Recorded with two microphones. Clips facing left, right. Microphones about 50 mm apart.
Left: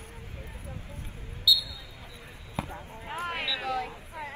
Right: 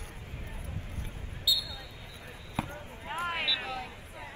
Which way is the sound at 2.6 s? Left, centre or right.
Centre.